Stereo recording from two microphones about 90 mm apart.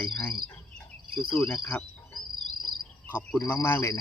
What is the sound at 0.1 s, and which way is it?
Insect, 10° left (ahead or behind).